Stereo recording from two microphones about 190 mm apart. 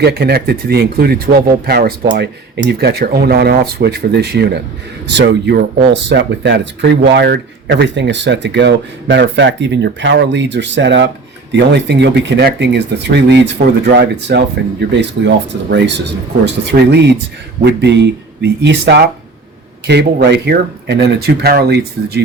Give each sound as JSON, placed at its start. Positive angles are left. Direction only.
{"t": 0.0, "sound": "speech", "side_deg": -60}
{"t": 16.6, "sound": "speech", "side_deg": -65}